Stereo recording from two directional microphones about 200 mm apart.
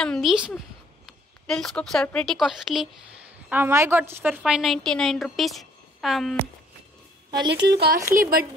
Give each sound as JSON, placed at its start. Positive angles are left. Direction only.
{"t": 0.0, "sound": "a woman's voice", "side_deg": 0}
{"t": 7.4, "sound": "speech", "side_deg": -60}